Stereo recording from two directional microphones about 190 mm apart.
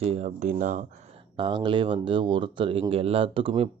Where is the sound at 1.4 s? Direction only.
25° right (ahead or behind).